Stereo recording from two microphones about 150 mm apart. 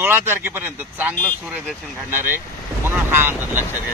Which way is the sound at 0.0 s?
15° right (ahead or behind).